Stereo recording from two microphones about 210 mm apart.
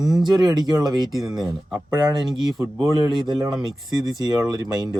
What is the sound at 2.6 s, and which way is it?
Speech, 20° right (ahead or behind).